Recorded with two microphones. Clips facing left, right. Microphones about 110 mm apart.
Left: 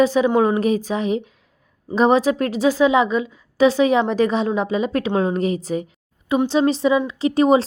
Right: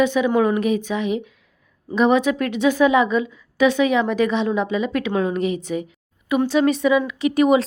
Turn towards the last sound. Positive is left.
turn(degrees=30)  # may be behind; listen again after turning